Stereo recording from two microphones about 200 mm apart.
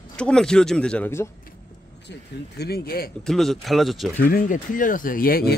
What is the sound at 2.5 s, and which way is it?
Speech, 50° left (ahead or behind).